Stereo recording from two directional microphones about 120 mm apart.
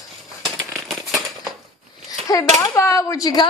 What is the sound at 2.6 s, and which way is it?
Speech, 25° left (ahead or behind).